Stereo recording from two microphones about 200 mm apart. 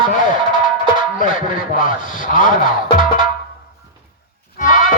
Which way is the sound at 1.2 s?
45° left (ahead or behind).